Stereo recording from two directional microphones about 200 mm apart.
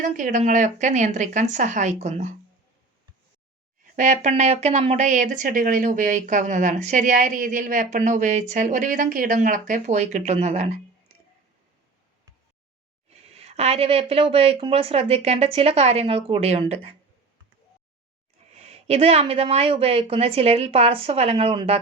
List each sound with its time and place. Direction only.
0.0 s speech: 40° right (ahead or behind)
3.9 s speech: 40° right (ahead or behind)
13.2 s speech: 30° right (ahead or behind)
18.5 s speech: 30° right (ahead or behind)